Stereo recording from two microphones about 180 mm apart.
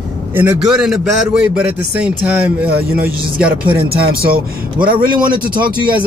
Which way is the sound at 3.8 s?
55° right (ahead or behind).